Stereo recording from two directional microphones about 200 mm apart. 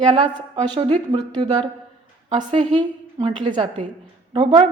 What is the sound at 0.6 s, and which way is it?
A woman's voice, 25° right (ahead or behind).